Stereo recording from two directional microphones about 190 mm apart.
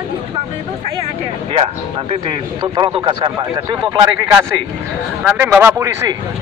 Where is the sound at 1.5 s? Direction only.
30° right (ahead or behind); by 6.1 s 15° right (ahead or behind).